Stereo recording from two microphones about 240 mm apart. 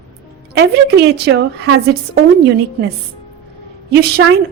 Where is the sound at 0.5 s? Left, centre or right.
Right.